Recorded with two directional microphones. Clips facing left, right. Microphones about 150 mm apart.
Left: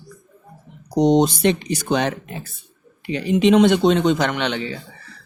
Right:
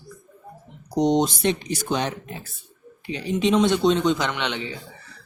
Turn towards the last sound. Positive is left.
turn(degrees=40)  # may be behind; listen again after turning